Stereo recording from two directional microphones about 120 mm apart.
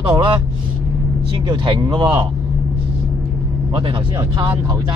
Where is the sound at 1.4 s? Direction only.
35° right (ahead or behind).